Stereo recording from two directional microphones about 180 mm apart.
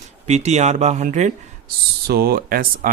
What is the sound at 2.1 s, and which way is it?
Speech, 60° right (ahead or behind).